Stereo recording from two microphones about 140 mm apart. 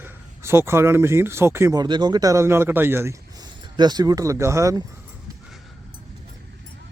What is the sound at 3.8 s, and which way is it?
Speech, 30° right (ahead or behind).